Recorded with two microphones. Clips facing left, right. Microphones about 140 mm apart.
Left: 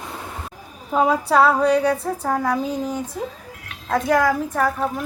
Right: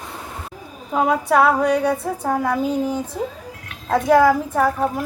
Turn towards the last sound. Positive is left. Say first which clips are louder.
# right 2 dB
turn(degrees=-5)  # may be behind; listen again after turning